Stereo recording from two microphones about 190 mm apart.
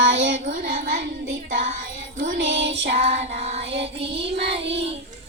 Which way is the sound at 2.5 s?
70° right (ahead or behind).